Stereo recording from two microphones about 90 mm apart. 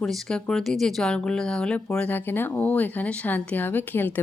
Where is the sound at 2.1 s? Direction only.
25° left (ahead or behind).